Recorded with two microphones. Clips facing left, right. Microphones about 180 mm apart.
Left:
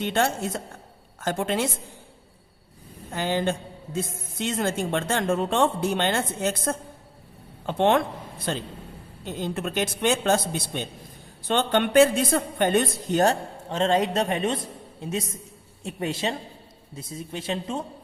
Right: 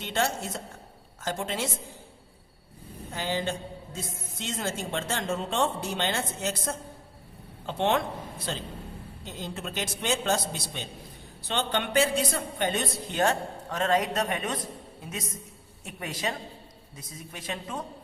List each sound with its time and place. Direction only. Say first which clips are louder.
0.0 s a woman's voice: left 5 dB; 55° left (ahead or behind)
3.2 s a woman's voice: left 5 dB; 55° left (ahead or behind)
13.7 s a man's voice: left 4 dB; 25° left (ahead or behind)